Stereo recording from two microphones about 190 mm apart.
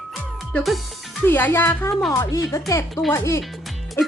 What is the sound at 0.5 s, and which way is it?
A woman's voice, centre (ahead or behind).